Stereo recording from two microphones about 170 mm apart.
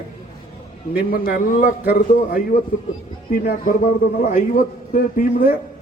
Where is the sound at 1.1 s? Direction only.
55° left (ahead or behind).